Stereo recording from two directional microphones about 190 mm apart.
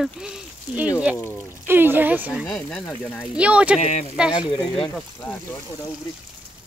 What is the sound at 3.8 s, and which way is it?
Speech, 35° left (ahead or behind).